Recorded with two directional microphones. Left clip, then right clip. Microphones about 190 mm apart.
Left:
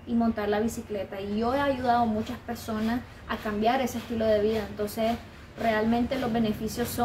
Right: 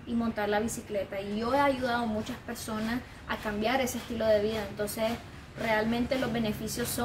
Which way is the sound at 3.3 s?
15° right (ahead or behind).